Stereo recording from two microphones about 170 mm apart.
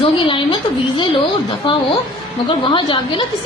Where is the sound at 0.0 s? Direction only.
30° left (ahead or behind).